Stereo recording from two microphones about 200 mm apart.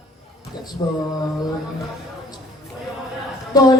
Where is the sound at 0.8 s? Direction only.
20° left (ahead or behind).